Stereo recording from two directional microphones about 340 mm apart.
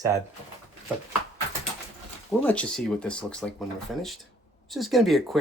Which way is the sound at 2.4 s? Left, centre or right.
Centre.